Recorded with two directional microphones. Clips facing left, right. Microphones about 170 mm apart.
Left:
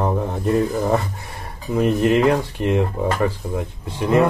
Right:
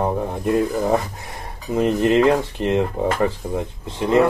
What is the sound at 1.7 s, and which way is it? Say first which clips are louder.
Speech: even; 20° right (ahead or behind).